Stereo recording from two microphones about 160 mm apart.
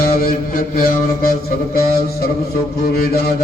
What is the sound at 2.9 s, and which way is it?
Mantra, 70° left (ahead or behind).